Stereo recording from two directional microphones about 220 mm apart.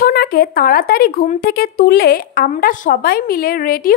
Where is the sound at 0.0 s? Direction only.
45° left (ahead or behind).